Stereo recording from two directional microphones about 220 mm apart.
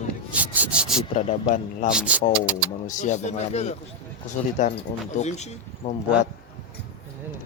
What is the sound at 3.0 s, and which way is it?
A man's voice, 30° left (ahead or behind).